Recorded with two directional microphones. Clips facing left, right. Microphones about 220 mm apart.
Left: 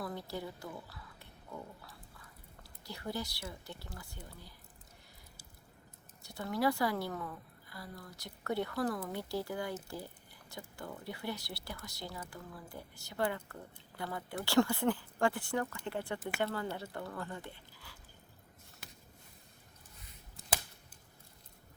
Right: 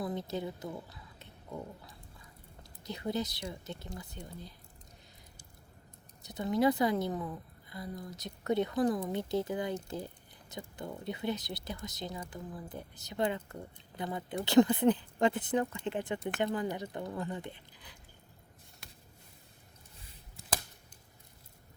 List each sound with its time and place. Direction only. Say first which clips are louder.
0.0 s speech: right 5 dB; 20° right (ahead or behind)
6.2 s speech: right 5 dB; 20° right (ahead or behind)
10.8 s speech: right 5 dB; 20° right (ahead or behind)
18.8 s a sound: left 1 dB; centre (ahead or behind)